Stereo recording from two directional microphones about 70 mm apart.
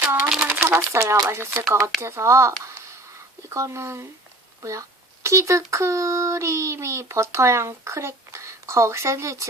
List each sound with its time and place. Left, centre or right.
0.4 s a sound: right
0.8 s speech: right
1.3 s speech: right